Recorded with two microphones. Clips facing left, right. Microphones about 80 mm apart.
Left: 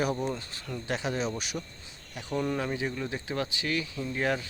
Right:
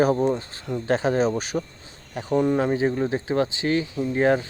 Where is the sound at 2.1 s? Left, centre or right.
Right.